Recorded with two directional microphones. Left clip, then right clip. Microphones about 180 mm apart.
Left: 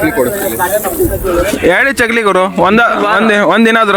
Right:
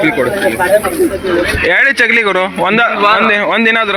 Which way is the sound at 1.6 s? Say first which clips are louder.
Right 1 dB; 45° left (ahead or behind).